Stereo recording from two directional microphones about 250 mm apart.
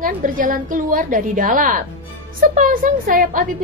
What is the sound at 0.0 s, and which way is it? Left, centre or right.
A woman's voice, right.